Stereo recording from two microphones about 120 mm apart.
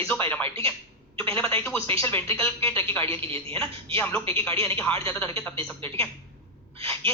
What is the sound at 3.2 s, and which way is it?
Speech, 50° right (ahead or behind).